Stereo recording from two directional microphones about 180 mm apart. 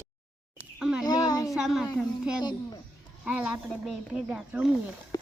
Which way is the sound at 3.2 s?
5° right (ahead or behind).